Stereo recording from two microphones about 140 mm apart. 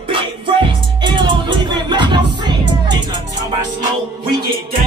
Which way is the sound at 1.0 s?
35° right (ahead or behind).